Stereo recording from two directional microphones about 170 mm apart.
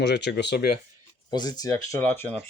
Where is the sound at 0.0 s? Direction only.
85° left.